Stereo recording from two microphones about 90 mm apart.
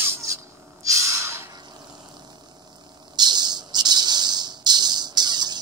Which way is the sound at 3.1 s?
55° right (ahead or behind).